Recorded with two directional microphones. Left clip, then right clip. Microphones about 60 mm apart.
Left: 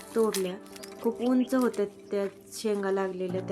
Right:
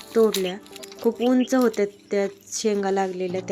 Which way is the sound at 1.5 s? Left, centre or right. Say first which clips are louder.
Right 6 dB; right.